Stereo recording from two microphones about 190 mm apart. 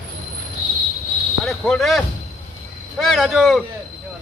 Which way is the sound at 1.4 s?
Centre (ahead or behind).